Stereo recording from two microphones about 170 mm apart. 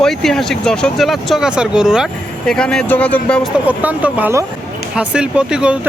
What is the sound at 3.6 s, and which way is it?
Speech, 10° right (ahead or behind).